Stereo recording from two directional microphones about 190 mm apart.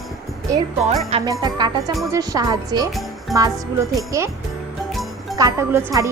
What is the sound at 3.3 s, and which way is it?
Speech, 20° right (ahead or behind).